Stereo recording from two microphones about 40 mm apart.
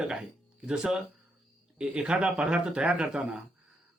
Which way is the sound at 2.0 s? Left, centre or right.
Right.